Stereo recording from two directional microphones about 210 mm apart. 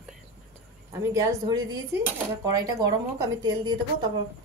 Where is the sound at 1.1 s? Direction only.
20° right (ahead or behind).